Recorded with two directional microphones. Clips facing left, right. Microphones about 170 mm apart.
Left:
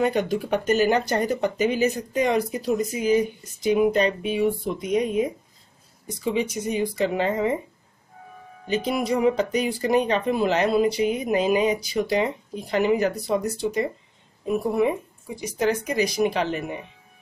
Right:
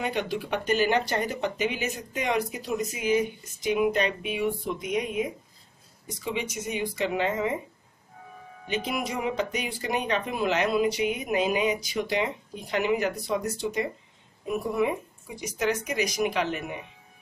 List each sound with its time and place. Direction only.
0.0 s speech: 45° left (ahead or behind)
8.6 s speech: 35° left (ahead or behind)